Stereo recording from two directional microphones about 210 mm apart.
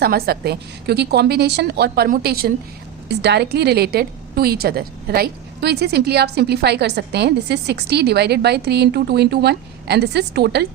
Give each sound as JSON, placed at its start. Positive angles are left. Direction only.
{"t": 0.0, "sound": "a woman's voice", "side_deg": -50}